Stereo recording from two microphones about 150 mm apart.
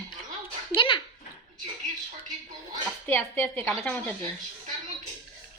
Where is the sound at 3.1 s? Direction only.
15° left (ahead or behind).